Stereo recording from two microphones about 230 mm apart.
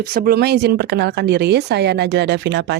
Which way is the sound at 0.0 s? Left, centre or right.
Right.